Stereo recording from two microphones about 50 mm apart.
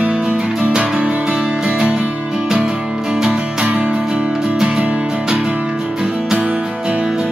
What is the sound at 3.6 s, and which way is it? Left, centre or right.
Music, right.